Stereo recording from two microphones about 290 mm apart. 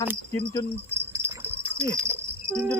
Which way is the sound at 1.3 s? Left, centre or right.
Centre.